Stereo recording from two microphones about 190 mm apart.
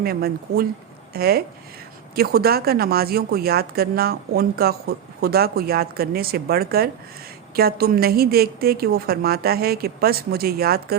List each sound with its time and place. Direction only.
0.0 s a woman's voice: 55° right (ahead or behind)